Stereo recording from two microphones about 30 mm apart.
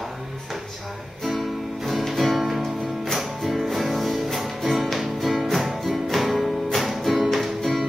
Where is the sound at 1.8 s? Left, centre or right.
Centre.